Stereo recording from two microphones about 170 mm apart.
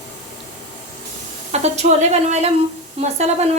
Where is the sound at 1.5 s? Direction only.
40° right (ahead or behind).